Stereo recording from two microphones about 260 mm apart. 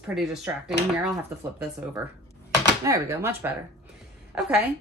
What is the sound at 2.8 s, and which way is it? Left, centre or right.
A woman's voice, centre.